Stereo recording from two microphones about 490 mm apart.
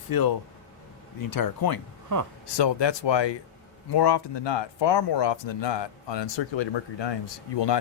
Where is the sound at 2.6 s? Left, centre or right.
Left.